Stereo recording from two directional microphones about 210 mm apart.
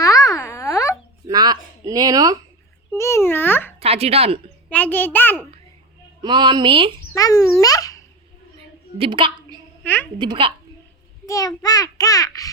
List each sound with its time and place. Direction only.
0.0 s music: 15° left (ahead or behind)
1.3 s a sound: 20° right (ahead or behind)
2.9 s a child's voice: 15° left (ahead or behind)
3.8 s speech: 30° right (ahead or behind)
4.7 s a child's voice: 10° left (ahead or behind)
6.2 s a woman's voice: 20° right (ahead or behind)
7.1 s a child's voice: 15° left (ahead or behind)
9.0 s a woman's voice: 25° right (ahead or behind)
9.8 s a woman's voice: 10° left (ahead or behind)
10.2 s a woman's voice: 25° right (ahead or behind)
11.3 s a child's voice: 15° left (ahead or behind)